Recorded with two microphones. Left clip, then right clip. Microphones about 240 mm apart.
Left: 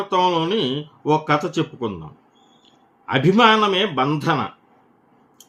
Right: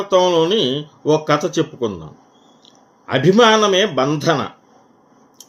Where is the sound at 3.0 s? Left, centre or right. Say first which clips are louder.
Right 3 dB; centre.